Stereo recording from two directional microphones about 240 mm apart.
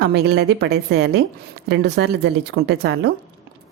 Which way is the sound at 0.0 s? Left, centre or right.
Right.